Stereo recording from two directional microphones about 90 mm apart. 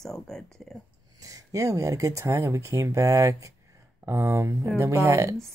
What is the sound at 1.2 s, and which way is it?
Speech, 40° right (ahead or behind).